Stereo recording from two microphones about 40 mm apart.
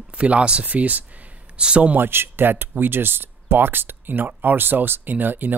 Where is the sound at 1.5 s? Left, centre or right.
Right.